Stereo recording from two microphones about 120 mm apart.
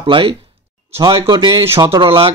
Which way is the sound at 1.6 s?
20° right (ahead or behind).